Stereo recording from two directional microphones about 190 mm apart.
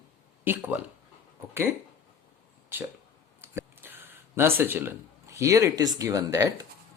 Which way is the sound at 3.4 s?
10° right (ahead or behind).